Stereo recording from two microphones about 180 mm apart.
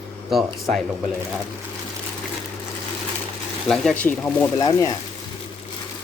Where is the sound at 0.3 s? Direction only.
Centre (ahead or behind).